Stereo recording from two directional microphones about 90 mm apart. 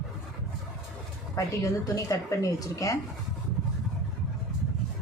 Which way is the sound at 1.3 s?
40° left (ahead or behind).